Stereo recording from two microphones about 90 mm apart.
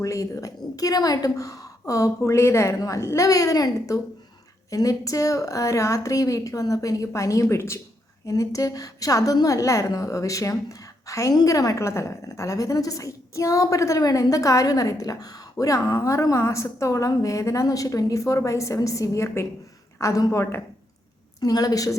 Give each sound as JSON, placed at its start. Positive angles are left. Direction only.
{"t": 0.0, "sound": "a woman's voice", "side_deg": 40}
{"t": 21.4, "sound": "a woman's voice", "side_deg": 45}